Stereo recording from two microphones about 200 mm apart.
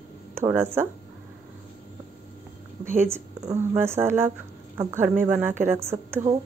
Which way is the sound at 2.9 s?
10° right (ahead or behind).